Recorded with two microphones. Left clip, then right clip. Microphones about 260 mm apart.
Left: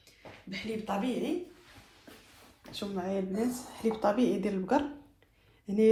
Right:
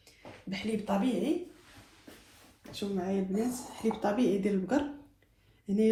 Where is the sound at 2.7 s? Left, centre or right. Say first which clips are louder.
Even; left.